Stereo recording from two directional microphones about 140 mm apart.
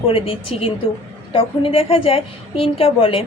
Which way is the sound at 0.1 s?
45° left (ahead or behind).